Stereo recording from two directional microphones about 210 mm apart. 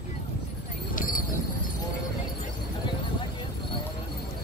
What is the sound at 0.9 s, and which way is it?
Clip-clop, 40° left (ahead or behind).